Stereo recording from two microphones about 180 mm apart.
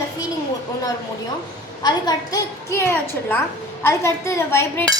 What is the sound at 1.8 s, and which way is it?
A woman's voice, 20° left (ahead or behind).